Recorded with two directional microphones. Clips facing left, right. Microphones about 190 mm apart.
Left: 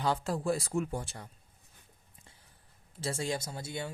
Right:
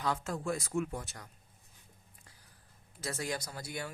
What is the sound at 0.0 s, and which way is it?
Speech, 30° left (ahead or behind).